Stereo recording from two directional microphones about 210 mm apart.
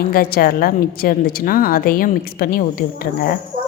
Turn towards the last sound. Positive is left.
turn(degrees=45)  # may be behind; listen again after turning